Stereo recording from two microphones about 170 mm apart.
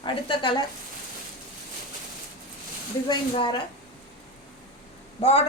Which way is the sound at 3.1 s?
25° left (ahead or behind).